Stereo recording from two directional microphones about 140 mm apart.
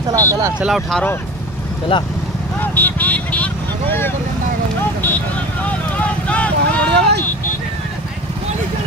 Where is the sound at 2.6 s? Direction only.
10° left (ahead or behind).